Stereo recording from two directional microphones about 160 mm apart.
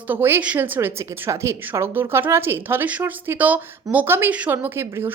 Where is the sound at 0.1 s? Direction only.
15° right (ahead or behind).